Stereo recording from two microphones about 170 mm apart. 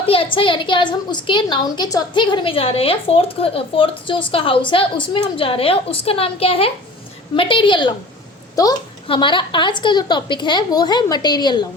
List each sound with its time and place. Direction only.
0.0 s a woman's voice: 35° left (ahead or behind)